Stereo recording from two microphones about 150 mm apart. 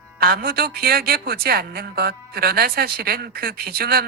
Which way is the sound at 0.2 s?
90° right.